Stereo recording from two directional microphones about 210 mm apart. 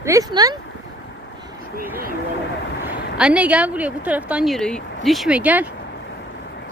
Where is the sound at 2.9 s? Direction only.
5° right (ahead or behind).